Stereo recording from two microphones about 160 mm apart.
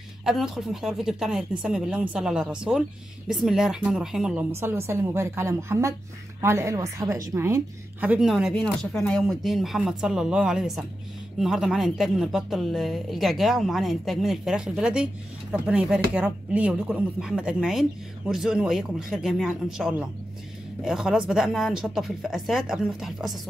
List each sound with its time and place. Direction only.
0.2 s a woman's voice: centre (ahead or behind)
4.6 s a woman's voice: 15° right (ahead or behind)